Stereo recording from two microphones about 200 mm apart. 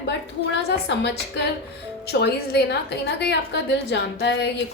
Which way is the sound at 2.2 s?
55° left (ahead or behind).